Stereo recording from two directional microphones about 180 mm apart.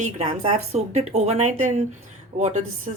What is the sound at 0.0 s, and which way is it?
A woman's voice, 40° right (ahead or behind).